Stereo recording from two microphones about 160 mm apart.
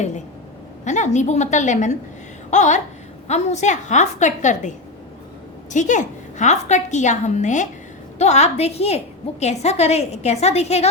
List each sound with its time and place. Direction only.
0.9 s a woman's voice: 45° left (ahead or behind)
5.7 s a woman's voice: 50° left (ahead or behind)